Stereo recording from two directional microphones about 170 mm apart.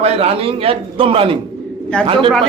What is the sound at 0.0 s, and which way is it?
A man's voice, 35° right (ahead or behind).